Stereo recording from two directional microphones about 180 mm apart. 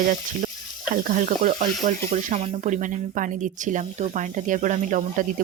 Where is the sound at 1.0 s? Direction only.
45° right (ahead or behind).